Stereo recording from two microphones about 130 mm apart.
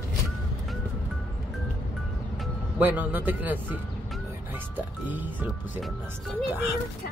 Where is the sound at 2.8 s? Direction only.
15° right (ahead or behind).